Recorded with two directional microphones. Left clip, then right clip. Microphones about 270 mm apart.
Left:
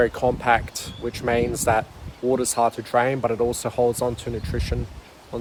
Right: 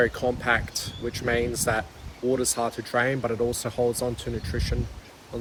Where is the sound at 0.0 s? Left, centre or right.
Centre.